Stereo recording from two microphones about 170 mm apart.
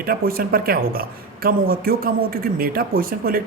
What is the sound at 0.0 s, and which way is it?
Speech, 60° right (ahead or behind).